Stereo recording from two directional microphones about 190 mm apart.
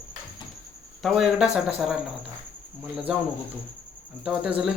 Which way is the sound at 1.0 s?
Centre (ahead or behind).